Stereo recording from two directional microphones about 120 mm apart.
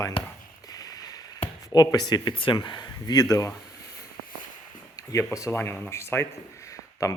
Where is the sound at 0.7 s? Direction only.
30° left (ahead or behind).